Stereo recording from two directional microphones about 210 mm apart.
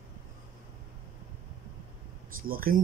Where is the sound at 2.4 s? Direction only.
45° right (ahead or behind).